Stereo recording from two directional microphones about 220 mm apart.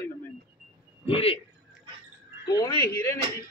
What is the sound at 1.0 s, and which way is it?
Speech, 25° left (ahead or behind).